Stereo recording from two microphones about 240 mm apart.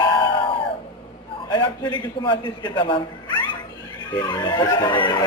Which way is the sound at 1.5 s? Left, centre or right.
Centre.